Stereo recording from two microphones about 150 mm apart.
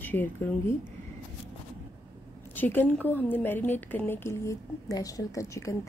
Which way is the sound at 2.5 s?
10° left (ahead or behind).